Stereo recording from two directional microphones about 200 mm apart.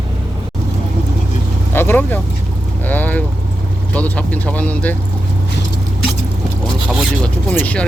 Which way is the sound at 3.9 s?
5° left (ahead or behind).